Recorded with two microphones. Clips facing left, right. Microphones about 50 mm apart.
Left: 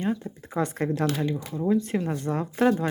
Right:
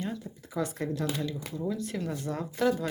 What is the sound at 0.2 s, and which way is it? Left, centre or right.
Speech, left.